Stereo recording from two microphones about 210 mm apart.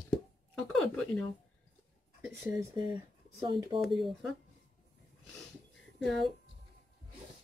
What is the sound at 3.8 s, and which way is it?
Speech, centre (ahead or behind).